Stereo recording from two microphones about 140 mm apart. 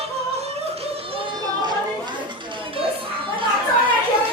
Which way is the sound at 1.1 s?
40° right (ahead or behind).